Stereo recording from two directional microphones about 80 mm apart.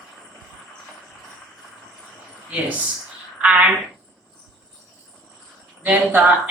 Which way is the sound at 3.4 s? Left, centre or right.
Centre.